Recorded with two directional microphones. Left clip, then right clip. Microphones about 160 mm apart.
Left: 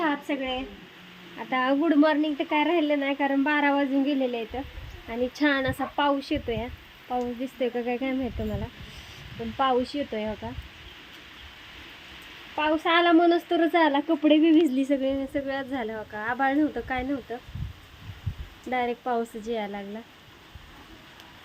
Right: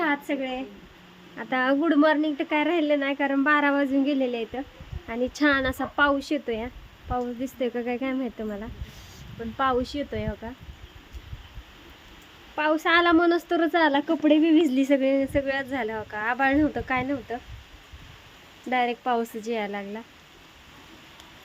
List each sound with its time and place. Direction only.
0.0 s a sound: 10° right (ahead or behind)
1.4 s a woman's voice: 5° right (ahead or behind); by 10.5 s 10° left (ahead or behind)
12.5 s a woman's voice: centre (ahead or behind); by 17.4 s 30° right (ahead or behind)
18.7 s speech: 25° right (ahead or behind)